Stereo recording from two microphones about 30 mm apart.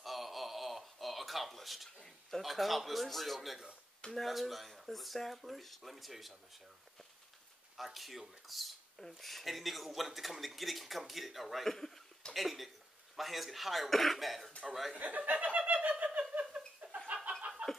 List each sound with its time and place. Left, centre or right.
0.0 s a sound: centre
2.4 s speech: centre
3.3 s speech: centre
4.1 s speech: centre
7.7 s speech: centre
11.6 s speech: centre
12.4 s speech: centre
15.0 s speech: right
16.1 s a sound: right
17.4 s chicken: right